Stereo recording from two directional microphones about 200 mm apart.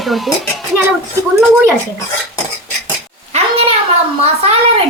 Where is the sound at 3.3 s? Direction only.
35° right (ahead or behind).